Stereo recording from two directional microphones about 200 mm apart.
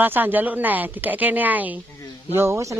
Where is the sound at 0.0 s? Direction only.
10° right (ahead or behind).